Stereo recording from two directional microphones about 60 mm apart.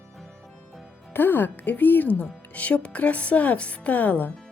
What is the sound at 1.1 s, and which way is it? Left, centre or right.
A woman's voice, left.